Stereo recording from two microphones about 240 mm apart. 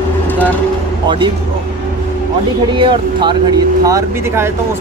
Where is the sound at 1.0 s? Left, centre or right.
Centre.